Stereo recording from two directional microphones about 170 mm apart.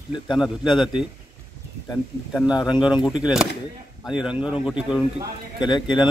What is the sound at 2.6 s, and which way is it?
Speech, 25° left (ahead or behind).